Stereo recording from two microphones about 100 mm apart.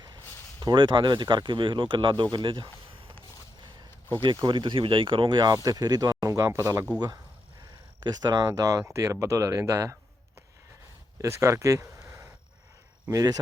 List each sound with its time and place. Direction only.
0.6 s speech: 50° right (ahead or behind)
4.4 s speech: 50° right (ahead or behind)
5.6 s speech: 40° right (ahead or behind)
8.0 s speech: 40° right (ahead or behind)
11.2 s speech: 30° right (ahead or behind)
13.1 s speech: 40° right (ahead or behind)